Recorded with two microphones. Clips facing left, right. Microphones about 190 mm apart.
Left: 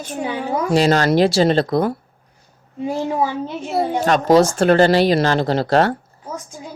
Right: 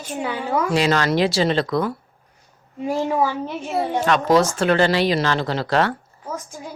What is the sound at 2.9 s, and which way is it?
Speech, 15° left (ahead or behind).